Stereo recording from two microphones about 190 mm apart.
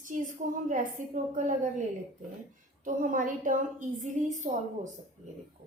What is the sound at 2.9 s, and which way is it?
A woman's voice, 45° right (ahead or behind).